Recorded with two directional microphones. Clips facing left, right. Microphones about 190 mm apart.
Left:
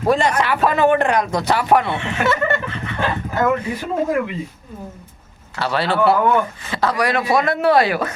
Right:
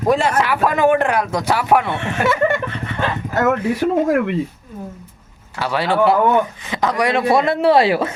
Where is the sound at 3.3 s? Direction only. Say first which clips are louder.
Right 3 dB; 75° right (ahead or behind).